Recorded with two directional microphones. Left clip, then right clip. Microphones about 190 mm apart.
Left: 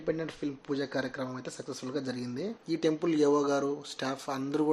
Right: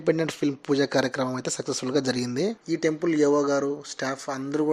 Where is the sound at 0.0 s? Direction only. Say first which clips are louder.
Right 9 dB; 50° right (ahead or behind).